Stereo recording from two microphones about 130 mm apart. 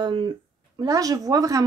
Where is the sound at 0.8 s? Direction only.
30° right (ahead or behind).